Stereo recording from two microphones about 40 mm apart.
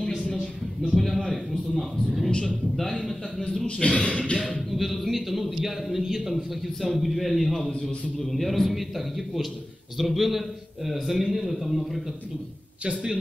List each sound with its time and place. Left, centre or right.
0.9 s a man's voice: centre
3.6 s speech: left
4.4 s a man's voice: centre